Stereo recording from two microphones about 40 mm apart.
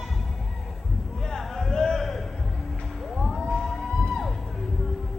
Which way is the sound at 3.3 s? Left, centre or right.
Centre.